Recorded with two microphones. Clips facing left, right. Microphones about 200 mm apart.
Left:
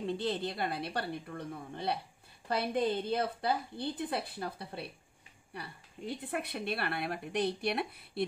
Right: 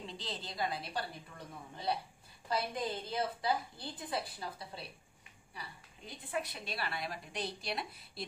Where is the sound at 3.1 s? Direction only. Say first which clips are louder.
Left 3 dB; 60° left (ahead or behind).